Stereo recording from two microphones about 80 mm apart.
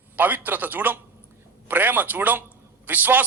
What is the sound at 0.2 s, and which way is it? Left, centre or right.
A man's voice, right.